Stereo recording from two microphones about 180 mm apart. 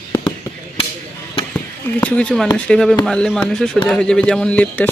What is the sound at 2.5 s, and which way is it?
Speech, 5° left (ahead or behind).